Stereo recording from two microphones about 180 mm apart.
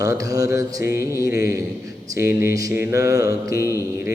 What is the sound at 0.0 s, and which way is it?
Mantra, 20° right (ahead or behind).